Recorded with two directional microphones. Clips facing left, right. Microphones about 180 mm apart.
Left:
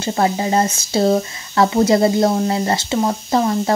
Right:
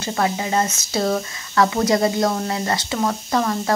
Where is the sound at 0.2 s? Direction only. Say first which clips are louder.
Left 4 dB; 30° left (ahead or behind).